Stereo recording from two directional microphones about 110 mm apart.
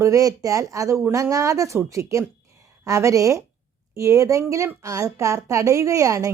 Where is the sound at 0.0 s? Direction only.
30° right (ahead or behind).